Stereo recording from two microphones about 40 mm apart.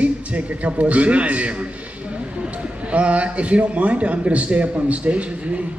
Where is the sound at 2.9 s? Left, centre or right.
Right.